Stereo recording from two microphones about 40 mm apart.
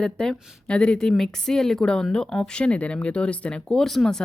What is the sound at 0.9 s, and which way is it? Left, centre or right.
Speech, centre.